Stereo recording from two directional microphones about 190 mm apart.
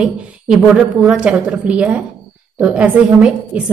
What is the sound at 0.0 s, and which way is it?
A woman's voice, 5° right (ahead or behind).